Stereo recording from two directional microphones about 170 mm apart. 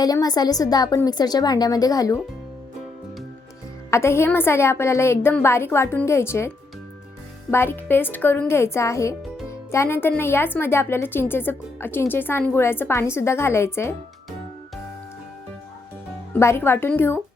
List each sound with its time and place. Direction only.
0.0 s a woman's voice: 25° left (ahead or behind)
3.9 s speech: 15° left (ahead or behind)
7.5 s speech: 15° left (ahead or behind)
16.4 s speech: 15° left (ahead or behind)